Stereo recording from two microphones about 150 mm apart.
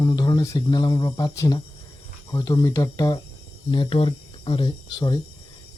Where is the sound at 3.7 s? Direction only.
35° left (ahead or behind).